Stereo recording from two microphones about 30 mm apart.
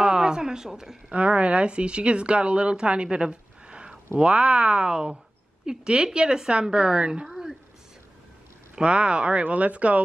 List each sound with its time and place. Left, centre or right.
0.0 s speech: right
1.1 s speech: right
5.7 s a woman's voice: right
8.7 s speech: right
9.4 s speech: right